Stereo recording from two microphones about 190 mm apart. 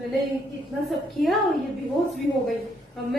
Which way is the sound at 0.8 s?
Centre (ahead or behind).